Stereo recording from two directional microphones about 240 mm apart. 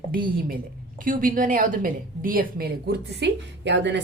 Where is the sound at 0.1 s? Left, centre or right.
Right.